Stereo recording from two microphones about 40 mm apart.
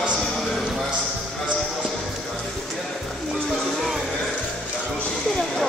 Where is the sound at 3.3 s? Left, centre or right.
Centre.